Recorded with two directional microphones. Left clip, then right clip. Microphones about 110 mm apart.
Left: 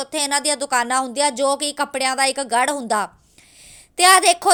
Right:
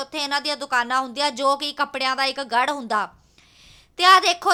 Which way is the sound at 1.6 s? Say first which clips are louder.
Left 2 dB; 35° left (ahead or behind).